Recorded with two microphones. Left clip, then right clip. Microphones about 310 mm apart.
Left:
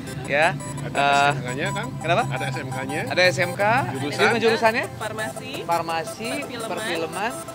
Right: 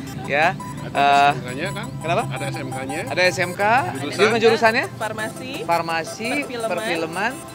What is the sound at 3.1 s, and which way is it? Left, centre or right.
Speech, centre.